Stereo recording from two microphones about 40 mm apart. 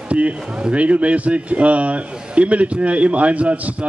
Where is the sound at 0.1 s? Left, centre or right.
Right.